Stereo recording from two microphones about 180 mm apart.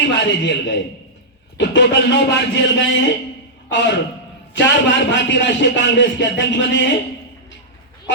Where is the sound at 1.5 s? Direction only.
75° left (ahead or behind).